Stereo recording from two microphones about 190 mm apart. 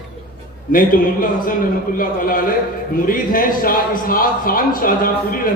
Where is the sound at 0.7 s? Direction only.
45° left (ahead or behind).